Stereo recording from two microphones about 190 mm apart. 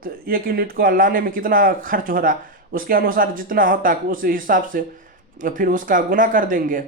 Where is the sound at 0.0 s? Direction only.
50° right (ahead or behind).